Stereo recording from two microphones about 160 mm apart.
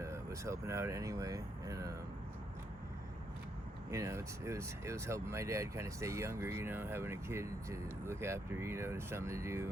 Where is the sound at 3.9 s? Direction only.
20° right (ahead or behind).